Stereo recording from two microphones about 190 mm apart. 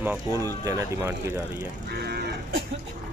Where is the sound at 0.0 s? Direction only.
15° right (ahead or behind).